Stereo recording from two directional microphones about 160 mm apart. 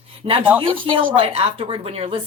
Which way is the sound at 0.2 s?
35° right (ahead or behind).